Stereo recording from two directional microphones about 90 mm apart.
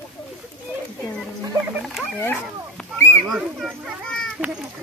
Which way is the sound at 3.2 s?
5° right (ahead or behind).